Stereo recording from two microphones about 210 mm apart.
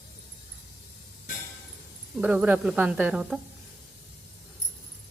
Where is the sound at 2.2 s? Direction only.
5° right (ahead or behind).